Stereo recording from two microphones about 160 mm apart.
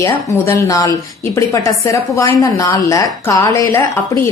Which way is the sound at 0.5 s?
20° left (ahead or behind).